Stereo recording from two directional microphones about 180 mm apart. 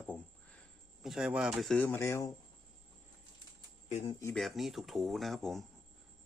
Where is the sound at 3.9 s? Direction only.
40° left (ahead or behind).